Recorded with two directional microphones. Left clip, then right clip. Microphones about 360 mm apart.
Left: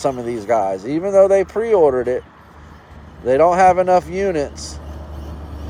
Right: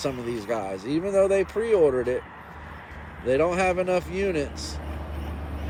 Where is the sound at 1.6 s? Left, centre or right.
Centre.